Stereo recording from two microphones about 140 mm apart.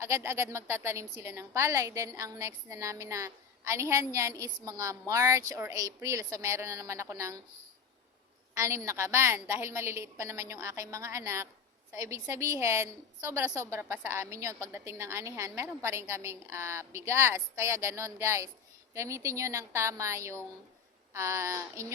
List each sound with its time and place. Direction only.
0.0 s a woman's voice: 20° right (ahead or behind)
8.5 s a woman's voice: 20° right (ahead or behind)